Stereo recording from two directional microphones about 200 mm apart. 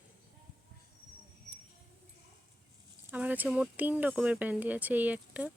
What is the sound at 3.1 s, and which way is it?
Speech, 5° right (ahead or behind).